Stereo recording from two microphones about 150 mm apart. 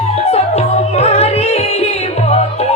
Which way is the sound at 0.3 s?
45° left (ahead or behind).